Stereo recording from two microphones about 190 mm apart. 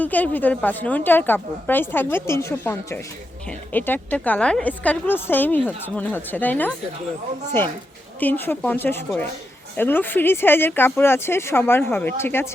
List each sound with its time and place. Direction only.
0.0 s a woman's voice: 10° left (ahead or behind)
8.2 s a woman's voice: 10° left (ahead or behind)